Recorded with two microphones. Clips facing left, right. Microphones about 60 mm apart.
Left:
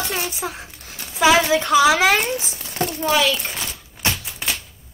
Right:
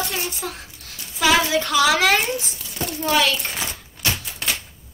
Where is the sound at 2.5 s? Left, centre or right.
Left.